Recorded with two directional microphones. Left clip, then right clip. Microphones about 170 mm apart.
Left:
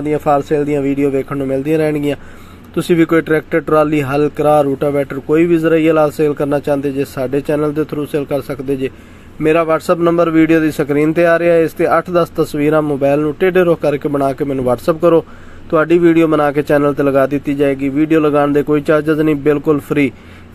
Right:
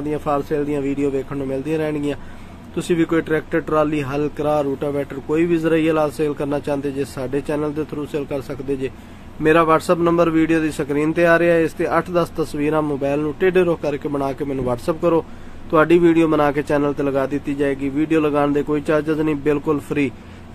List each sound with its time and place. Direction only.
0.1 s speech: 30° left (ahead or behind)